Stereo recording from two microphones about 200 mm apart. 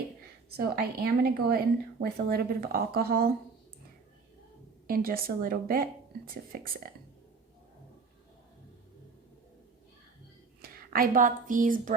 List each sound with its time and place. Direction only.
0.5 s speech: 50° right (ahead or behind)
4.9 s speech: 45° right (ahead or behind)
10.6 s speech: 45° right (ahead or behind)